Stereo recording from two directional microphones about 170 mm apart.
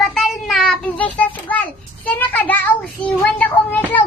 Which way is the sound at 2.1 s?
10° left (ahead or behind).